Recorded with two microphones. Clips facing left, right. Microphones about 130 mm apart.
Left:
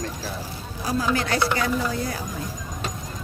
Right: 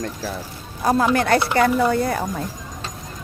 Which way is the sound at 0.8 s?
55° right (ahead or behind).